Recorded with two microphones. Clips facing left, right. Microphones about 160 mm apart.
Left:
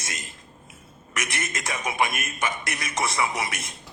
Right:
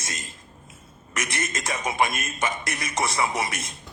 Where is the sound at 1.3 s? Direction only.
25° right (ahead or behind).